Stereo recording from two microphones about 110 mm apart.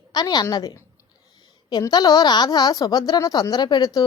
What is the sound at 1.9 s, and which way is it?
A woman's voice, 40° left (ahead or behind).